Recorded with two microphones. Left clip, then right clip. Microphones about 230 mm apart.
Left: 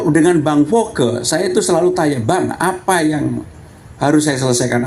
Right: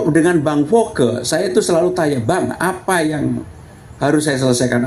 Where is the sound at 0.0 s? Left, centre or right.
Left.